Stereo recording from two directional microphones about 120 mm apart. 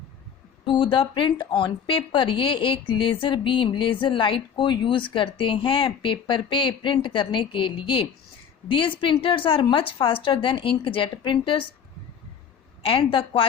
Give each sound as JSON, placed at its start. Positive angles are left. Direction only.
{"t": 0.6, "sound": "a woman's voice", "side_deg": 45}
{"t": 12.8, "sound": "a woman's voice", "side_deg": 45}